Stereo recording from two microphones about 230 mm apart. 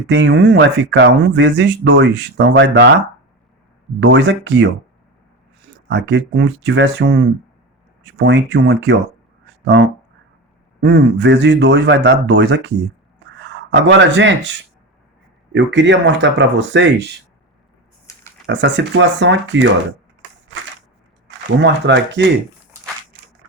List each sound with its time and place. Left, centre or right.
0.1 s speech: right
4.0 s speech: right
5.9 s speech: right
15.5 s speech: right
18.0 s a sound: centre
18.4 s speech: right
21.6 s speech: right